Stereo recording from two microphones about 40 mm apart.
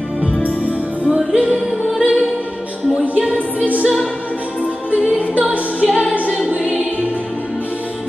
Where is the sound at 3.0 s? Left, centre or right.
Right.